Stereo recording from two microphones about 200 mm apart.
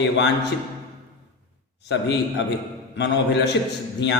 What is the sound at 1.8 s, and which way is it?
A man's voice, 60° left (ahead or behind).